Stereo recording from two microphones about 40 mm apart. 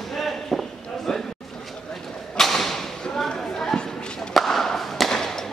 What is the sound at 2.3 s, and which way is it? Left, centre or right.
Thump, centre.